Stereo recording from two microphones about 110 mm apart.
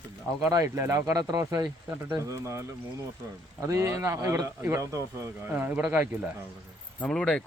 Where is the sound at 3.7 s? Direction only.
30° right (ahead or behind).